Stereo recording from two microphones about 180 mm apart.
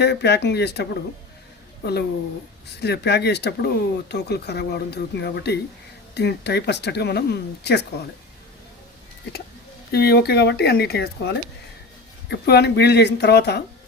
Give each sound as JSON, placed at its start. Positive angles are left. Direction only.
{"t": 0.0, "sound": "speech", "side_deg": 70}
{"t": 9.9, "sound": "speech", "side_deg": 60}